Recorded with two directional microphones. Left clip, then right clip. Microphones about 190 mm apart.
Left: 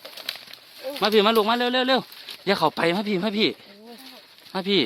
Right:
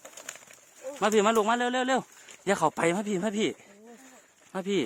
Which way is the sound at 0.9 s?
15° right (ahead or behind).